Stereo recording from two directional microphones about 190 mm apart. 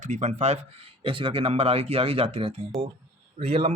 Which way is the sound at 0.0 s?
40° right (ahead or behind).